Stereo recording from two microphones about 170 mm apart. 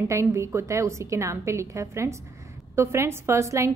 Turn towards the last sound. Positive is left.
turn(degrees=-15)  # may be behind; listen again after turning